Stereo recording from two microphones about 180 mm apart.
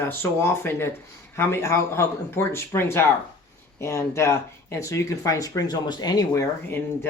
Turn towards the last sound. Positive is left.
turn(degrees=15)  # may be behind; listen again after turning